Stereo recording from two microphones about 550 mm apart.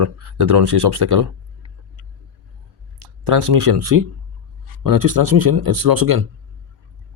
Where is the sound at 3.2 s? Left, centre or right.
Right.